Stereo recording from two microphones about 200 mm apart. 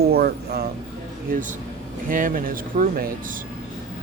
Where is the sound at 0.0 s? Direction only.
50° right (ahead or behind).